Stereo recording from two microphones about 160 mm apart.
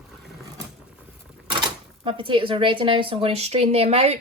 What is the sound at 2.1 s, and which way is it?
Speech, 30° right (ahead or behind).